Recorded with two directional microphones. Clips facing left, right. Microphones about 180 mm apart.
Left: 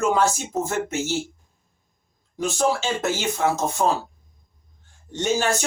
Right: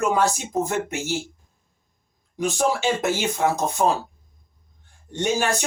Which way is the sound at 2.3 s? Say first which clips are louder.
Even; 15° right (ahead or behind).